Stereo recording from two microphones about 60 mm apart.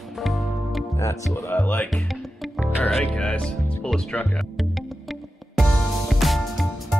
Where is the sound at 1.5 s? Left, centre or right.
Left.